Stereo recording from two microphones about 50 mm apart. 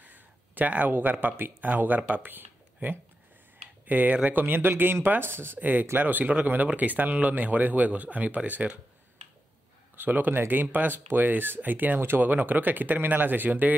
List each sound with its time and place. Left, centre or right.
0.0 s a sound: right
1.4 s speech: right
5.6 s speech: right
9.9 s speech: right